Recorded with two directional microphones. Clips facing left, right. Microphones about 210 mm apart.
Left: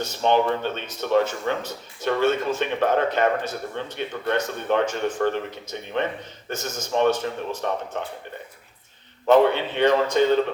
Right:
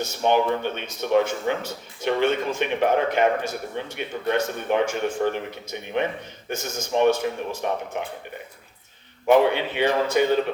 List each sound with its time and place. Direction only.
0.0 s speech: 10° right (ahead or behind)
9.2 s speech: 10° right (ahead or behind)